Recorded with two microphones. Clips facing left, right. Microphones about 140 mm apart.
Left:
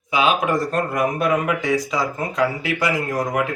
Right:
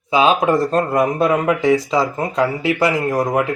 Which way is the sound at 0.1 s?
30° right (ahead or behind).